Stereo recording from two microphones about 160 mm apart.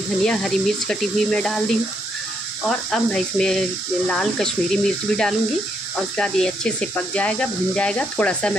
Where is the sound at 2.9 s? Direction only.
5° left (ahead or behind).